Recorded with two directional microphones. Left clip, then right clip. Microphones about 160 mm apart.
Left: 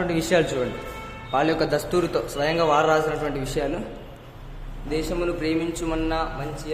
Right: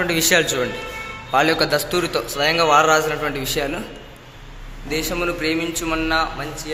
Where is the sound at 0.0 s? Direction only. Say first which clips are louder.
Right 4 dB; 10° left (ahead or behind).